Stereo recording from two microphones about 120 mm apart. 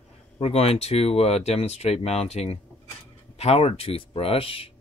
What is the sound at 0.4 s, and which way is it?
Speech, 55° left (ahead or behind).